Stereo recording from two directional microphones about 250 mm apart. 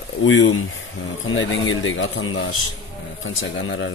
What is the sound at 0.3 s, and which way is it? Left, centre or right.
Speech, left.